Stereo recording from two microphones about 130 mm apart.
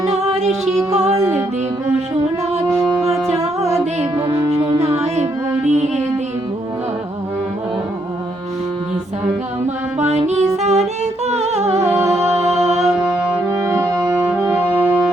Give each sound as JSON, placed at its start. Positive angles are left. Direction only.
{"t": 4.4, "sound": "music", "side_deg": -50}
{"t": 10.0, "sound": "music", "side_deg": -55}
{"t": 13.6, "sound": "brass instrument", "side_deg": -25}
{"t": 14.4, "sound": "music", "side_deg": -10}